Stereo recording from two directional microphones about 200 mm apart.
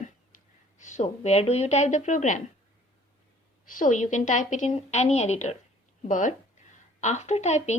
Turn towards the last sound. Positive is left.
turn(degrees=35)  # may be behind; listen again after turning